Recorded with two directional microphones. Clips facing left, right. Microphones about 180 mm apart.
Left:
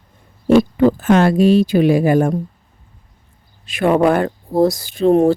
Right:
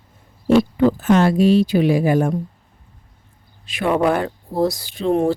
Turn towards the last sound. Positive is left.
turn(degrees=45)  # may be behind; listen again after turning